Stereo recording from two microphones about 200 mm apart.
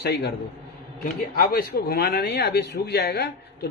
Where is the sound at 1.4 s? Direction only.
50° left (ahead or behind).